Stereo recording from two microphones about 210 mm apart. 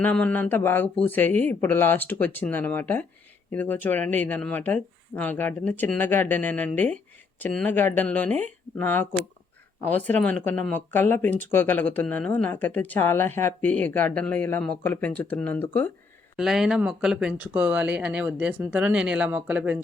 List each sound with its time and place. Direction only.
0.0 s speech: 5° left (ahead or behind)